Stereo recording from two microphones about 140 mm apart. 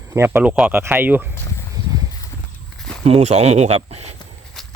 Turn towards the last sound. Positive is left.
turn(degrees=-45)  # may be behind; listen again after turning